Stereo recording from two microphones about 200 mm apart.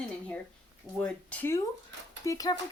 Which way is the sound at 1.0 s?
5° left (ahead or behind).